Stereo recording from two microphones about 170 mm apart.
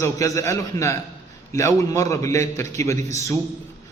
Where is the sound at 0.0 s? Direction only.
20° left (ahead or behind).